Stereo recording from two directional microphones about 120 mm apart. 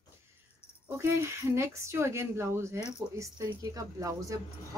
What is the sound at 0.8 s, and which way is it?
A woman's voice, 20° right (ahead or behind).